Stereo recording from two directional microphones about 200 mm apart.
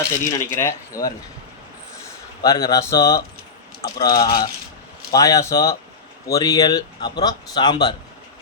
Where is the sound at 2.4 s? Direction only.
20° left (ahead or behind).